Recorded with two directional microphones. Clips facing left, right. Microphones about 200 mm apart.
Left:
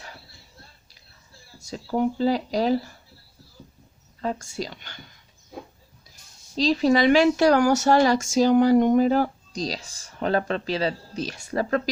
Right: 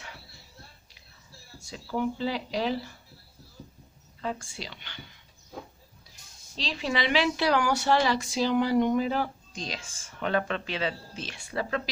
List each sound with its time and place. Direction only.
1.5 s speech: 40° left (ahead or behind)
4.2 s a woman's voice: 40° left (ahead or behind)
6.6 s a woman's voice: 40° left (ahead or behind)